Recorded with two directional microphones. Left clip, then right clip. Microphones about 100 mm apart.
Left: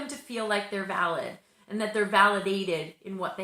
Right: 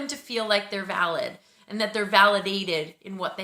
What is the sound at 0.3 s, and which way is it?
A woman's voice, 20° right (ahead or behind).